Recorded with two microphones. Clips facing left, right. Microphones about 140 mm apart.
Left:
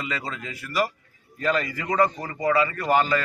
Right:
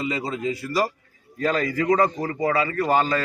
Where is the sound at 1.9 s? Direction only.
40° right (ahead or behind).